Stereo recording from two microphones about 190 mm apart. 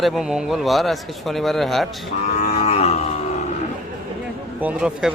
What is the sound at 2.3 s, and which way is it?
Cattle, 40° left (ahead or behind).